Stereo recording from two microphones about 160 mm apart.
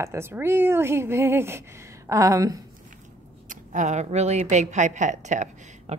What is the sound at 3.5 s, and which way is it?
A woman's voice, 50° right (ahead or behind).